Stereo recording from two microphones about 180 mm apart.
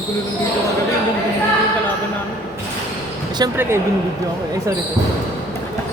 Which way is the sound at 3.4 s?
20° right (ahead or behind).